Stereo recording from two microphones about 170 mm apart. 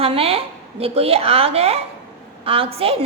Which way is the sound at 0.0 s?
35° right (ahead or behind).